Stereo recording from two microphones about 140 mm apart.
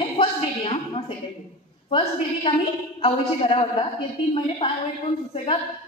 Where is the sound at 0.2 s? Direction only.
40° left (ahead or behind).